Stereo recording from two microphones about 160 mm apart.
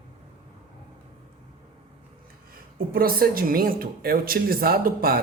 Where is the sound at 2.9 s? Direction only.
70° right (ahead or behind).